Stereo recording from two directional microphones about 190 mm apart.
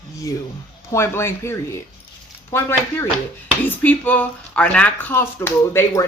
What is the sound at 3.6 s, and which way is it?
Speech, 10° left (ahead or behind).